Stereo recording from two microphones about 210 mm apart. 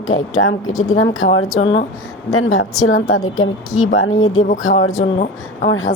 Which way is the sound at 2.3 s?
75° left (ahead or behind).